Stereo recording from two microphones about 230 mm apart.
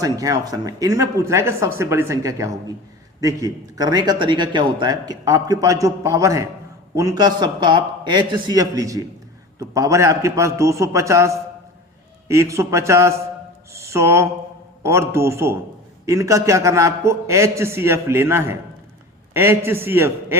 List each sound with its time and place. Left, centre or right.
0.0 s a man's voice: centre